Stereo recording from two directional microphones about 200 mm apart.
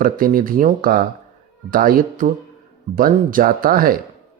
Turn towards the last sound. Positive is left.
turn(degrees=-45)  # may be behind; listen again after turning